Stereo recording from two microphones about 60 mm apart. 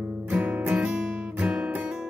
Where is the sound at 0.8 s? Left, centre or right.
Centre.